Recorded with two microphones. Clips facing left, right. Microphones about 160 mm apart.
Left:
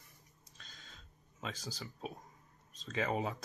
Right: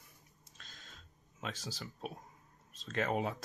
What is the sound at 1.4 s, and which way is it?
Speech, centre (ahead or behind).